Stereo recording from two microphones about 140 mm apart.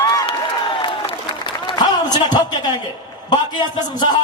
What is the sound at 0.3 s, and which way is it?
Applause, 35° left (ahead or behind).